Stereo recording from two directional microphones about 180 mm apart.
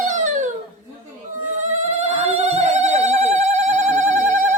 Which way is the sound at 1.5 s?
40° right (ahead or behind).